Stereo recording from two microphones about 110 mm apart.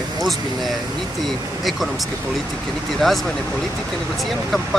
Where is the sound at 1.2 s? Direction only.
Centre (ahead or behind).